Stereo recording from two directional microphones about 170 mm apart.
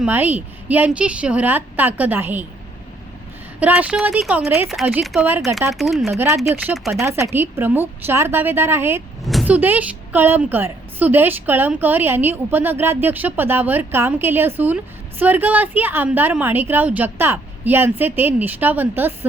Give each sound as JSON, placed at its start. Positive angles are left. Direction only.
{"t": 0.0, "sound": "a woman's voice", "side_deg": -10}
{"t": 3.6, "sound": "a woman's voice", "side_deg": -10}
{"t": 6.1, "sound": "a woman's voice", "side_deg": -15}
{"t": 6.7, "sound": "speech", "side_deg": 0}
{"t": 7.0, "sound": "a woman's voice", "side_deg": -15}
{"t": 9.2, "sound": "a woman's voice", "side_deg": -5}